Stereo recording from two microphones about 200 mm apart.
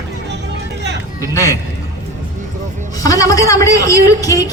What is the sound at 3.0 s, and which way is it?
A man's voice, 15° left (ahead or behind).